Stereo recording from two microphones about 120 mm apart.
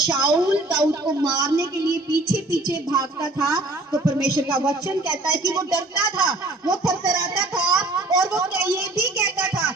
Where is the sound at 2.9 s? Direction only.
30° right (ahead or behind).